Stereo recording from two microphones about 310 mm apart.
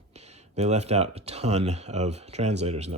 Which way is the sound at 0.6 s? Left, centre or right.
Right.